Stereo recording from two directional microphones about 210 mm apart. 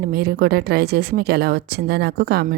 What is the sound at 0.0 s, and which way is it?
Speech, 45° right (ahead or behind).